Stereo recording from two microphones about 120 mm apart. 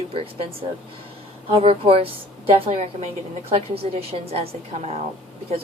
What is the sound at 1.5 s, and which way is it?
A woman's voice, 55° right (ahead or behind).